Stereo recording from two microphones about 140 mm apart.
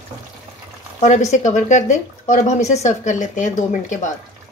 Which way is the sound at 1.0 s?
55° left (ahead or behind).